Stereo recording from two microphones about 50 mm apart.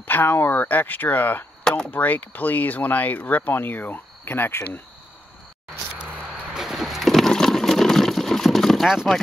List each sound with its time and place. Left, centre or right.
0.0 s speech: left
1.6 s a sound: centre
1.9 s speech: left
4.2 s speech: left
6.5 s a sound: centre
8.8 s speech: centre